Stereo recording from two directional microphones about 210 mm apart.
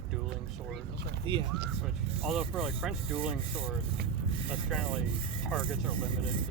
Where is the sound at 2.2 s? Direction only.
Centre (ahead or behind).